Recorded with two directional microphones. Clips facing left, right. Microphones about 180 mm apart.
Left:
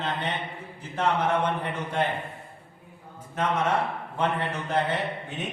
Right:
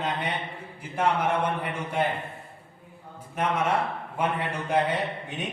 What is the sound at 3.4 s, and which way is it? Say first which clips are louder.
A man's voice: even; 10° right (ahead or behind).